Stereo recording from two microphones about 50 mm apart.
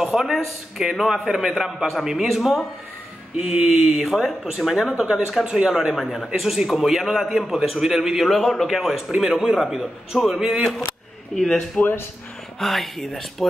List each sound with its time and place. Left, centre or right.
0.0 s a man's voice: centre
8.4 s speech: centre
8.6 s a man's voice: centre
11.3 s speech: centre
11.8 s speech: left
12.5 s a man's voice: centre